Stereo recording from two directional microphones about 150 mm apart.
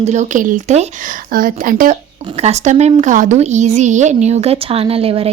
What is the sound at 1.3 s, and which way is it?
Speech, 70° right (ahead or behind).